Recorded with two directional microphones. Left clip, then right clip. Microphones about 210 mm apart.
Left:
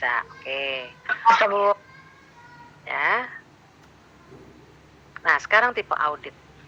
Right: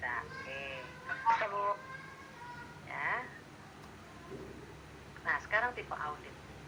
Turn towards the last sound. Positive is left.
turn(degrees=40)  # may be behind; listen again after turning